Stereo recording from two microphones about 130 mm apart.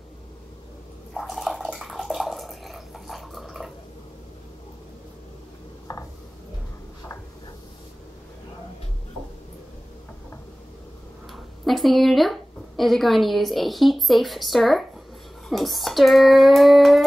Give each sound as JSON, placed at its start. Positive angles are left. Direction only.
{"t": 1.1, "sound": "bathtub", "side_deg": 0}
{"t": 5.9, "sound": "a sound", "side_deg": 30}
{"t": 11.3, "sound": "a woman's voice", "side_deg": 0}
{"t": 15.4, "sound": "child singing", "side_deg": 0}